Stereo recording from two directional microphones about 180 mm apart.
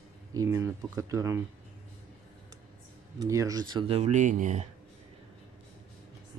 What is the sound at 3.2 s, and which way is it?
Speech, 20° right (ahead or behind).